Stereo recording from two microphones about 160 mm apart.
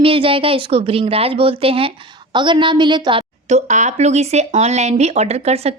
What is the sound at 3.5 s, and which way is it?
Speech, 45° right (ahead or behind).